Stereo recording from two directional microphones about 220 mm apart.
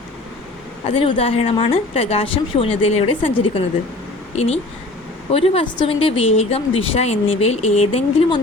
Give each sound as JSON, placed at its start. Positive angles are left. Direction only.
{"t": 0.9, "sound": "speech", "side_deg": 25}
{"t": 4.4, "sound": "speech", "side_deg": 30}